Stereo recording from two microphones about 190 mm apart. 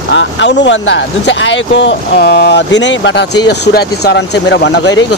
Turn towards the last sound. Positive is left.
turn(degrees=65)  # may be behind; listen again after turning